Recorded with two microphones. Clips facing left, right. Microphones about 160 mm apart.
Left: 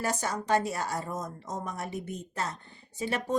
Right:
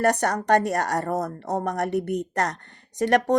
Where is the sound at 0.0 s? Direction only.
65° right (ahead or behind).